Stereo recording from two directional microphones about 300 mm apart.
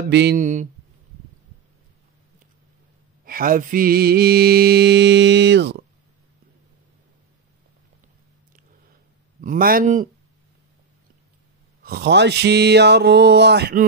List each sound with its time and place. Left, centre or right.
0.1 s a man's voice: right
3.3 s mantra: right
9.4 s a man's voice: right
11.8 s mantra: right